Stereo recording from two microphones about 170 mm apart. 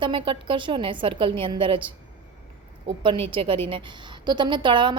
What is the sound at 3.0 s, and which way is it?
A woman's voice, 30° right (ahead or behind).